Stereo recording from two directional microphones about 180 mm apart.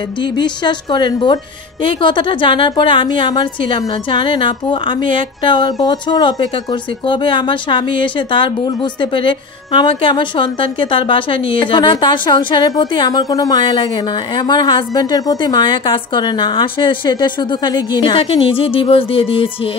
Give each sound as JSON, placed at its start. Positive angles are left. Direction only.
{"t": 0.2, "sound": "a woman's voice", "side_deg": 25}